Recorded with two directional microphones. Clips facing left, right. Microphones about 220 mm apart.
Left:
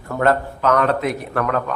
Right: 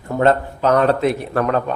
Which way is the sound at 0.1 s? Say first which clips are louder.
Right 2 dB; 25° right (ahead or behind).